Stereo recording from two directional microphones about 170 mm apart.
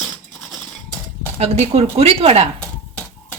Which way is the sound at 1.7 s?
35° right (ahead or behind).